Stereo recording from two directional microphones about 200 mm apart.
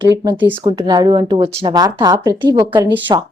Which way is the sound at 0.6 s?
20° right (ahead or behind).